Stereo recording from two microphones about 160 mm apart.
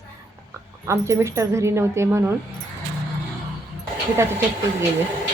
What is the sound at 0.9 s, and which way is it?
Speech, 20° right (ahead or behind).